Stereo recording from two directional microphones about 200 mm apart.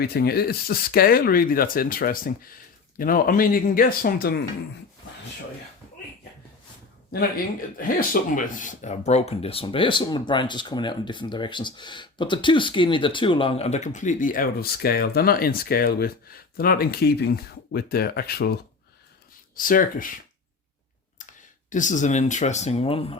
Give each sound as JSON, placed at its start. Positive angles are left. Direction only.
{"t": 0.0, "sound": "speech", "side_deg": 50}
{"t": 7.1, "sound": "speech", "side_deg": 50}
{"t": 19.5, "sound": "speech", "side_deg": 45}
{"t": 21.2, "sound": "speech", "side_deg": 40}